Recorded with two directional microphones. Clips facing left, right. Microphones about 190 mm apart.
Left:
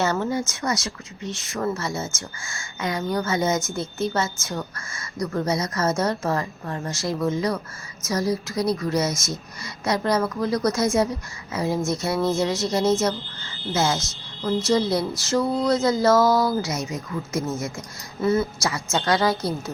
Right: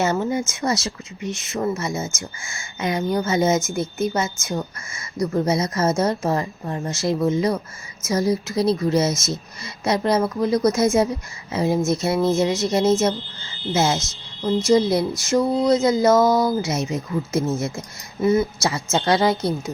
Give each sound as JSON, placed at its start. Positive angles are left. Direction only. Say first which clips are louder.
{"t": 0.0, "sound": "a woman's voice", "louder": "right 2 dB", "side_deg": -20}